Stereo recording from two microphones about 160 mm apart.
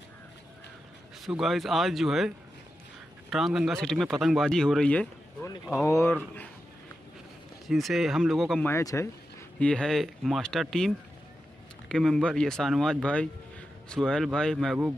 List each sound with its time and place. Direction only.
1.2 s speech: centre (ahead or behind)
7.6 s speech: centre (ahead or behind)
8.6 s speech: 20° left (ahead or behind)
9.6 s speech: 5° left (ahead or behind)
11.9 s speech: 5° left (ahead or behind)